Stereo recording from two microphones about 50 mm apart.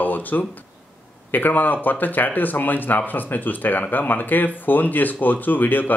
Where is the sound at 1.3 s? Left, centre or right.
Left.